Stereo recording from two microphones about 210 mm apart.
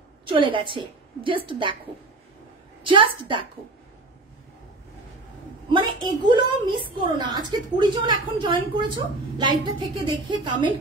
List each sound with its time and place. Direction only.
0.3 s a woman's voice: 25° right (ahead or behind)
2.8 s a woman's voice: 25° right (ahead or behind)
5.7 s a woman's voice: 20° right (ahead or behind)